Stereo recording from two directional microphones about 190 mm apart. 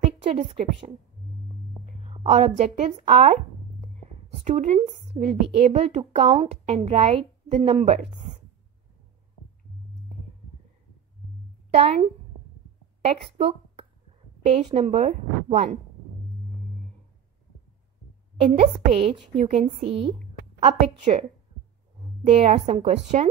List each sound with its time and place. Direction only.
0.3 s a woman's voice: 30° right (ahead or behind)
2.0 s a woman's voice: 30° right (ahead or behind)
4.5 s a woman's voice: 35° right (ahead or behind)
11.7 s a woman's voice: 30° right (ahead or behind)
18.4 s a woman's voice: 30° right (ahead or behind)
22.3 s a woman's voice: 30° right (ahead or behind)